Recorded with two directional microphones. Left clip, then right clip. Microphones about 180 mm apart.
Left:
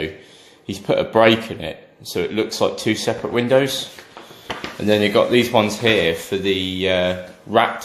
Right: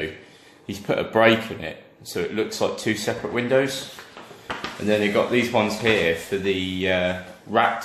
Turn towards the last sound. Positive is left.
turn(degrees=40)  # may be behind; listen again after turning